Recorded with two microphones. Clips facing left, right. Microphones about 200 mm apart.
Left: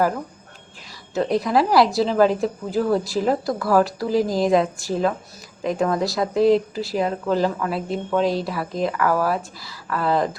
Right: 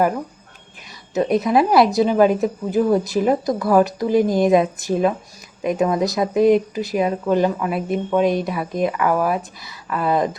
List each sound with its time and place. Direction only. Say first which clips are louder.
1.1 s speech: right 3 dB; 20° right (ahead or behind)